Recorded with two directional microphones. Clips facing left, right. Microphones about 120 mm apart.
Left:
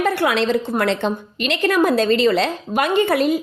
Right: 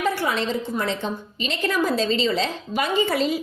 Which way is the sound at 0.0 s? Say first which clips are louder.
Left 5 dB; 65° left (ahead or behind).